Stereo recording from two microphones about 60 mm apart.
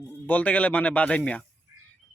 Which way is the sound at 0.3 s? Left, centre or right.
Left.